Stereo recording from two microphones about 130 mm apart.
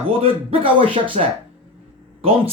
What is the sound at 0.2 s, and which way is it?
A man's voice, 45° right (ahead or behind).